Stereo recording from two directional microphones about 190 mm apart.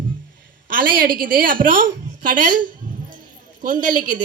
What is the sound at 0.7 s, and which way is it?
A woman's voice, 45° right (ahead or behind).